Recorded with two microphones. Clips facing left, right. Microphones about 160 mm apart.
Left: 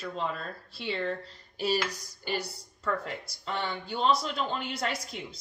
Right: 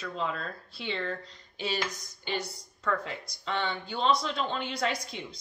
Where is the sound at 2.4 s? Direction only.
30° left (ahead or behind).